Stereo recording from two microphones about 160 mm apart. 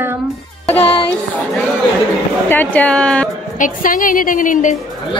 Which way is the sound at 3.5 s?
55° left (ahead or behind).